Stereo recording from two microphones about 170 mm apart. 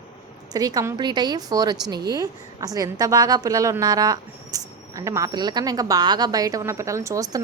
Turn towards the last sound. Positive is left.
turn(degrees=-20)  # may be behind; listen again after turning